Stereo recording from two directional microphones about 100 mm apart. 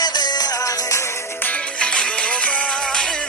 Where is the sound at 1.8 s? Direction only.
10° left (ahead or behind).